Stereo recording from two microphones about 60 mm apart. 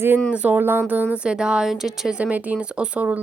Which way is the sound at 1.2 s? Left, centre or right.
Centre.